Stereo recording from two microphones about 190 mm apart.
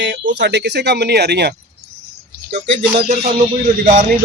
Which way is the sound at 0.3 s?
65° right (ahead or behind).